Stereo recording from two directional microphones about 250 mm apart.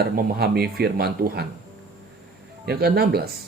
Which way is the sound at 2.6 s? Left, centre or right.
Right.